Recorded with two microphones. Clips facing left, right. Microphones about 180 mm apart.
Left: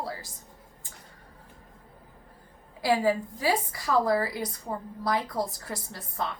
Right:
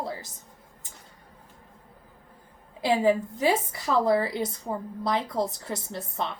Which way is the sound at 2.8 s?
20° right (ahead or behind).